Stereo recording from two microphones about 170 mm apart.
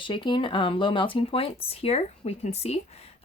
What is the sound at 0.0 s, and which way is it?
Speech, 30° left (ahead or behind).